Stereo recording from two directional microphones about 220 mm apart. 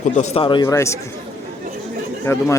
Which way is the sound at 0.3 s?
20° left (ahead or behind).